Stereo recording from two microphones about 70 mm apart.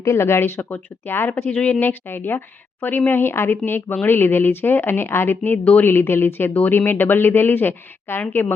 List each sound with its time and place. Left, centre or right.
0.0 s speech: left